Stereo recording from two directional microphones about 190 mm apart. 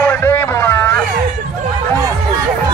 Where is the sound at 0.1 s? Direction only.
15° left (ahead or behind).